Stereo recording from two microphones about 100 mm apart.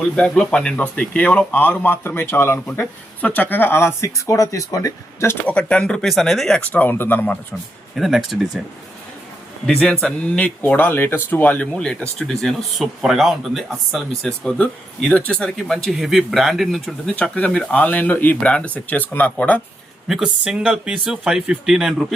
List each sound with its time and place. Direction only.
0.0 s speech: 10° left (ahead or behind); by 5.4 s 30° left (ahead or behind)
5.5 s speech: 10° left (ahead or behind)
6.6 s speech: 15° left (ahead or behind)
7.9 s speech: centre (ahead or behind)
9.6 s speech: 5° left (ahead or behind)
20.1 s speech: 5° right (ahead or behind)